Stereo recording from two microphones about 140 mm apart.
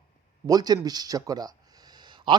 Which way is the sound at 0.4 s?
25° right (ahead or behind).